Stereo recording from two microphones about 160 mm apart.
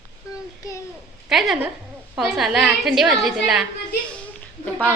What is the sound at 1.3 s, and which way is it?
A woman's voice, centre (ahead or behind).